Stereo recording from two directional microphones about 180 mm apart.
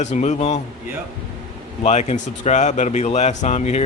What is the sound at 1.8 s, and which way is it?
Speech, 40° left (ahead or behind).